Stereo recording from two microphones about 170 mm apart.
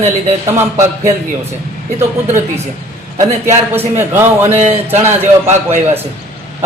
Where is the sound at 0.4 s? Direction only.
15° right (ahead or behind).